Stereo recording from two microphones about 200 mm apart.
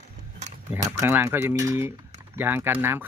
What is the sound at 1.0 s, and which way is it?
Speech, 15° right (ahead or behind).